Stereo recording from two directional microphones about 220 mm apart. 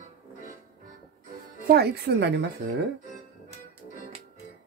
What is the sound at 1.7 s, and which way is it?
Speech, 45° right (ahead or behind).